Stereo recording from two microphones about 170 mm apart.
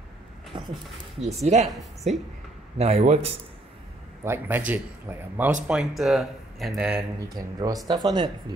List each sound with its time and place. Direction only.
0.5 s a sound: 25° right (ahead or behind)
1.2 s a man's voice: 40° right (ahead or behind)
2.8 s a man's voice: 40° right (ahead or behind)
4.2 s a man's voice: 10° right (ahead or behind)
7.2 s speech: 20° right (ahead or behind)